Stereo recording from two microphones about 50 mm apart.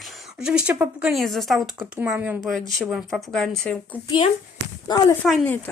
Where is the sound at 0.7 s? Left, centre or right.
Right.